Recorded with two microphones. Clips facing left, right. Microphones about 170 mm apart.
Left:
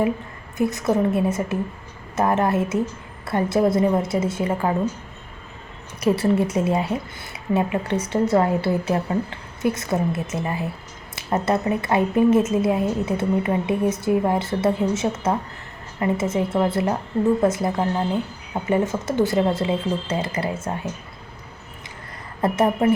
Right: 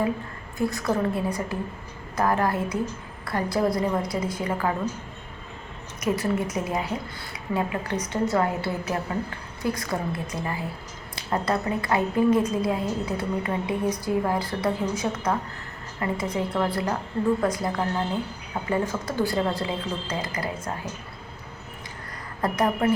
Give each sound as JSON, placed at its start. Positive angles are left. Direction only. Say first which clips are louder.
{"t": 0.6, "sound": "a woman's voice", "louder": "left 4 dB", "side_deg": 20}
{"t": 6.0, "sound": "a woman's voice", "louder": "left 6 dB", "side_deg": 30}
{"t": 22.4, "sound": "a woman's voice", "louder": "left 4 dB", "side_deg": 25}